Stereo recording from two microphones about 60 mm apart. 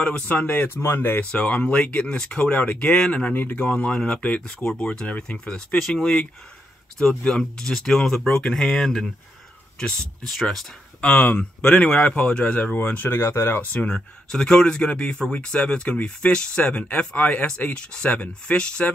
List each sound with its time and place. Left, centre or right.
0.0 s speech: left
1.3 s speech: left
5.8 s speech: centre
11.0 s speech: left
12.7 s speech: left
13.9 s speech: centre